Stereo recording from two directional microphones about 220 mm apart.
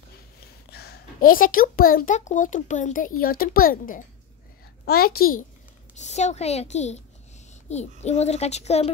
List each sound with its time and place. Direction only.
0.7 s a child's voice: 45° left (ahead or behind)
5.9 s a child's voice: 30° left (ahead or behind)